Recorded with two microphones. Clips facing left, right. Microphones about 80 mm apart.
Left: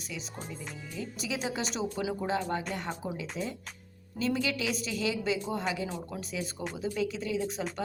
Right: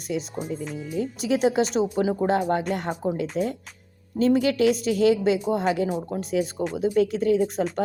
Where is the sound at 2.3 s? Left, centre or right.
Right.